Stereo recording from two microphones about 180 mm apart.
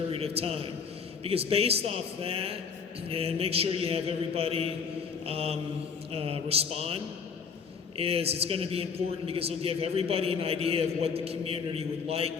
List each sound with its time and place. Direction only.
0.1 s a man's voice: 35° right (ahead or behind)